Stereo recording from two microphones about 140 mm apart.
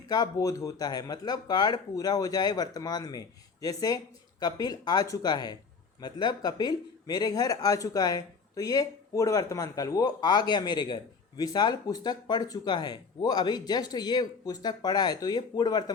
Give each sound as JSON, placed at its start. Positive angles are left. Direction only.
{"t": 0.1, "sound": "speech", "side_deg": 25}